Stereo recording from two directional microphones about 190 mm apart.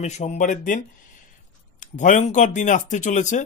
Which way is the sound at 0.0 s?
35° left (ahead or behind).